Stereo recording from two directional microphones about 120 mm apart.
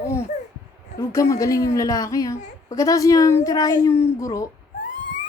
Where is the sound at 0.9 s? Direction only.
25° left (ahead or behind).